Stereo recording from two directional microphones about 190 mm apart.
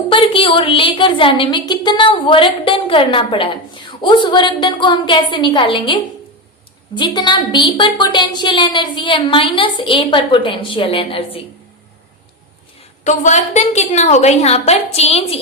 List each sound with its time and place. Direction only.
0.1 s a woman's voice: 25° left (ahead or behind)
13.1 s a woman's voice: 40° left (ahead or behind)